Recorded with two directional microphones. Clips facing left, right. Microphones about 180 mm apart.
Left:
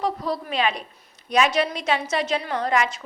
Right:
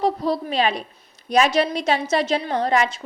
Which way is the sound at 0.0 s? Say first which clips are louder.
Right 4 dB; 30° right (ahead or behind).